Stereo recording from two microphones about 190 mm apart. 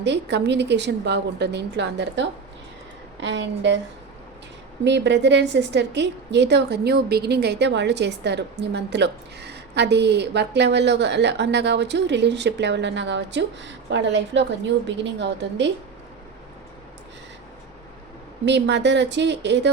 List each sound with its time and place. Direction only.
0.0 s a woman's voice: 65° right (ahead or behind)
4.8 s a woman's voice: 65° right (ahead or behind)
18.4 s speech: 65° right (ahead or behind)